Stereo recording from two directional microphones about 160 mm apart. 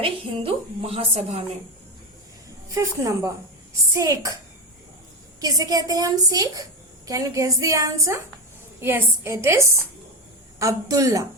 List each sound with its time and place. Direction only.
0.0 s a woman's voice: 35° right (ahead or behind)
2.7 s a woman's voice: 20° right (ahead or behind)
5.4 s a woman's voice: 25° right (ahead or behind)